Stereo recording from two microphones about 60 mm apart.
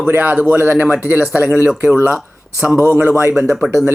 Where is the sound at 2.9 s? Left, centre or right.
Right.